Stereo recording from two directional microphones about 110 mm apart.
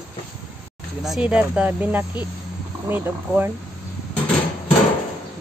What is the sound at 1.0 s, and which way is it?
Speech, 5° right (ahead or behind).